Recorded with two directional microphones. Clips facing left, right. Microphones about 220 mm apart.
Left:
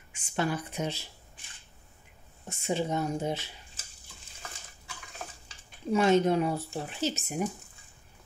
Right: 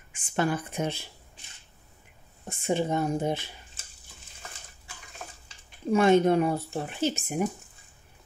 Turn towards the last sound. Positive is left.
turn(degrees=-55)  # may be behind; listen again after turning